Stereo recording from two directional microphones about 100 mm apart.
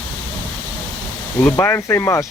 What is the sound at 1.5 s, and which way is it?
Speech, 20° left (ahead or behind).